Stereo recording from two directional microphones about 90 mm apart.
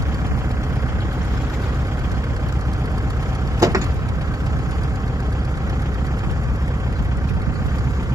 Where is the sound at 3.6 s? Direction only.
40° right (ahead or behind).